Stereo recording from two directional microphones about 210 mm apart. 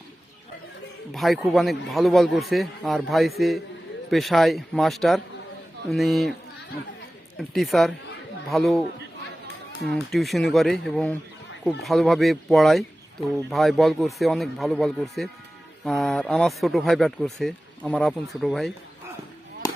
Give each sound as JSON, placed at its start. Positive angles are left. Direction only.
{"t": 1.1, "sound": "speech", "side_deg": 0}
{"t": 7.3, "sound": "speech", "side_deg": 0}
{"t": 9.8, "sound": "speech", "side_deg": 0}
{"t": 19.6, "sound": "chop", "side_deg": 15}